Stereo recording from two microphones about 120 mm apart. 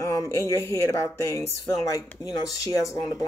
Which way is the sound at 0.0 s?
25° left (ahead or behind).